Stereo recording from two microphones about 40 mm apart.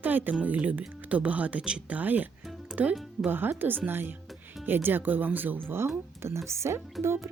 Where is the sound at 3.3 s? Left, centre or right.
Right.